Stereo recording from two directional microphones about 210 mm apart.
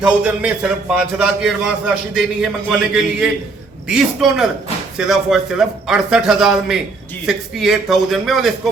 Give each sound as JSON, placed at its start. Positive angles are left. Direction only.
{"t": 0.0, "sound": "speech", "side_deg": -5}